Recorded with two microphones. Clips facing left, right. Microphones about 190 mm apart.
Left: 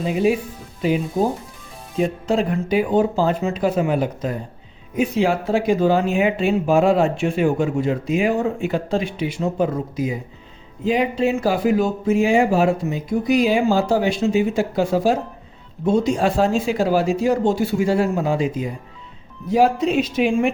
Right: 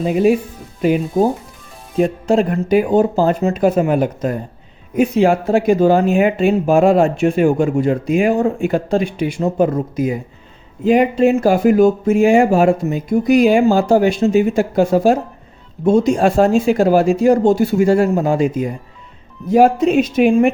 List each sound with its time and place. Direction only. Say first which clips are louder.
0.0 s speech: right 5 dB; 50° right (ahead or behind)